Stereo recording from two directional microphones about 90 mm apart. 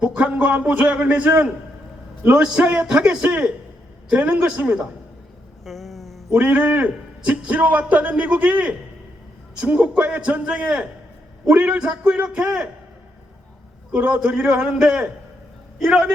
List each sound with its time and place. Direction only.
0.0 s a man's voice: 15° right (ahead or behind)
5.6 s a sound: centre (ahead or behind)
6.3 s a man's voice: 15° right (ahead or behind)
13.9 s a man's voice: 10° right (ahead or behind)